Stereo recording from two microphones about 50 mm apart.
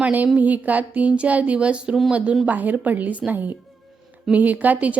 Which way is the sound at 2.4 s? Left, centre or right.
Right.